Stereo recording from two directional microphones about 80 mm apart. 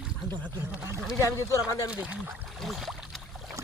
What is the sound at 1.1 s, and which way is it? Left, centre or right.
Speech, left.